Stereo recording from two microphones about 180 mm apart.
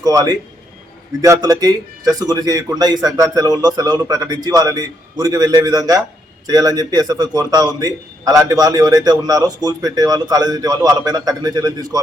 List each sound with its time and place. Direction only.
0.0 s a man's voice: 20° right (ahead or behind)